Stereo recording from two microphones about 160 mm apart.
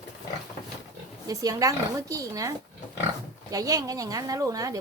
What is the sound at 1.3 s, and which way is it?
Speech, 20° right (ahead or behind).